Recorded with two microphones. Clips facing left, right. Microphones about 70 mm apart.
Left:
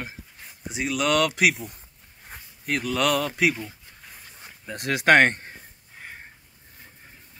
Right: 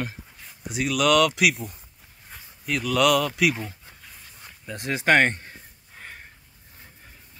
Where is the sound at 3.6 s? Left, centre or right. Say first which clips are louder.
Right 2 dB; right.